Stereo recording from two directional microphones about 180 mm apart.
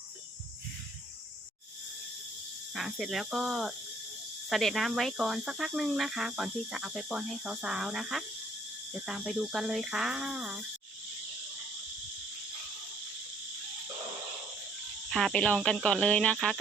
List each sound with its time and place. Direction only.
2.7 s speech: centre (ahead or behind)
15.1 s speech: 5° left (ahead or behind)